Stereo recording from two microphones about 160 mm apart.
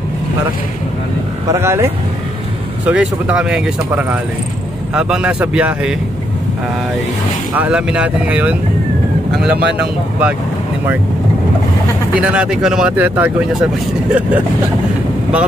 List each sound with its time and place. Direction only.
1.5 s speech: 15° right (ahead or behind)
7.5 s speech: 10° right (ahead or behind)
12.1 s speech: 5° right (ahead or behind)